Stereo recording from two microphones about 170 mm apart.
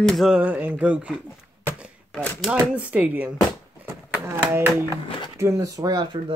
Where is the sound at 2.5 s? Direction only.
5° right (ahead or behind).